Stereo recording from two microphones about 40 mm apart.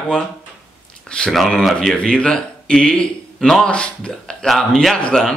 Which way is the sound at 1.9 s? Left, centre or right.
Left.